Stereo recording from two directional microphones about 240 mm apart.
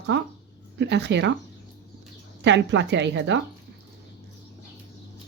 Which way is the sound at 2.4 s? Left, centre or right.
Right.